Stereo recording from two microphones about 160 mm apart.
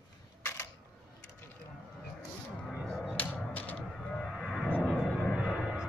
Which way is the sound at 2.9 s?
5° left (ahead or behind).